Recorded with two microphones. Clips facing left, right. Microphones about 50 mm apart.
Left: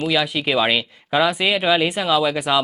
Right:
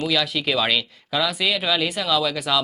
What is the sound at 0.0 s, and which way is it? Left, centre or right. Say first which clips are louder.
Speech: left 2 dB; centre.